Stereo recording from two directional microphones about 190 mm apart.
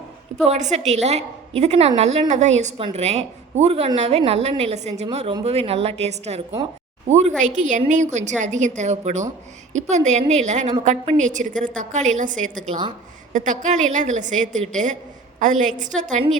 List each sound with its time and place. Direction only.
0.4 s a woman's voice: 35° right (ahead or behind)